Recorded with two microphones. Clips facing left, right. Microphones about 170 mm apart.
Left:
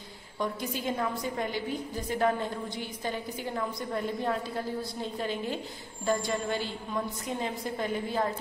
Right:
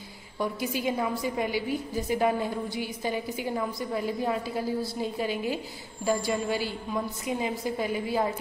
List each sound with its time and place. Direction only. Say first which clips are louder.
0.4 s a woman's voice: right 3 dB; 5° right (ahead or behind)